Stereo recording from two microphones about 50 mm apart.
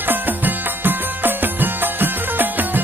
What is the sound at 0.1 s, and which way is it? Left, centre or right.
Music, right.